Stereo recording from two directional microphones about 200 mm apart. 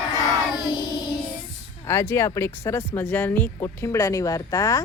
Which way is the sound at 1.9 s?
10° left (ahead or behind).